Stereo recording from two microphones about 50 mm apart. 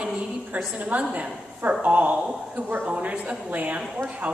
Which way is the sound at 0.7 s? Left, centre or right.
Right.